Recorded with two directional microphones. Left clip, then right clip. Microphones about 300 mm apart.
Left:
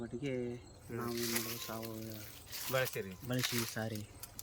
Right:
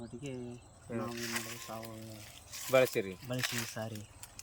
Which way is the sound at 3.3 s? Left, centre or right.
Centre.